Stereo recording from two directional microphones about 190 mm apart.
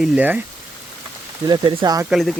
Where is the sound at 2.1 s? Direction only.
Centre (ahead or behind).